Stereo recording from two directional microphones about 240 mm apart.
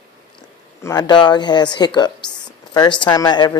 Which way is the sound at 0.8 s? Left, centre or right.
Centre.